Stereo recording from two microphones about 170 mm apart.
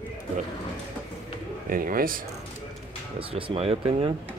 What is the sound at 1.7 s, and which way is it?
Speech, 55° right (ahead or behind).